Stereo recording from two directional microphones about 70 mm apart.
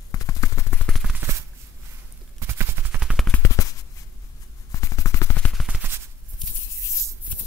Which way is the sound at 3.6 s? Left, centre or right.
Left.